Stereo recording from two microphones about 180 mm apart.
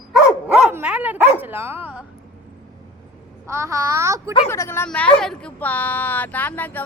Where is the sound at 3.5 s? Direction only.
15° right (ahead or behind).